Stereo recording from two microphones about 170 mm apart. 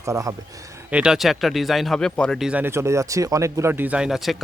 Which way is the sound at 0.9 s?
5° right (ahead or behind).